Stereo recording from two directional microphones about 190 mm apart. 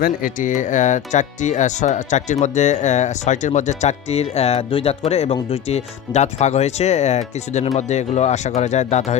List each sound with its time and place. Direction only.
0.0 s speech: 45° left (ahead or behind)